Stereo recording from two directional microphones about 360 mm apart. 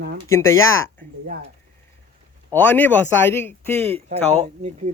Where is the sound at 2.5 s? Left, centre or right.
Centre.